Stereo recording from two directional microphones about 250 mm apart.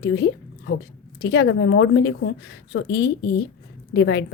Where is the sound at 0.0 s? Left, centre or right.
Left.